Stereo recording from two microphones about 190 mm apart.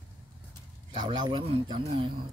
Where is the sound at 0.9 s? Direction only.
25° right (ahead or behind).